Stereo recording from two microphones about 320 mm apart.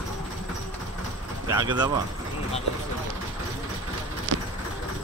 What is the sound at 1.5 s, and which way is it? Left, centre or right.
Speech, centre.